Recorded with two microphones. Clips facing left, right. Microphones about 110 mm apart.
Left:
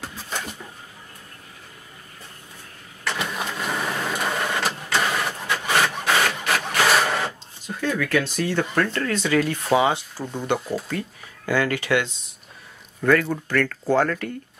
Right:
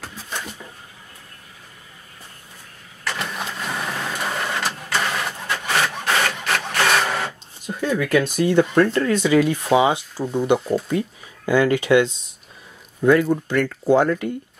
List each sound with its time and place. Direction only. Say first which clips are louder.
3.0 s vehicle: even; centre (ahead or behind)
7.6 s speech: right 3 dB; 15° right (ahead or behind)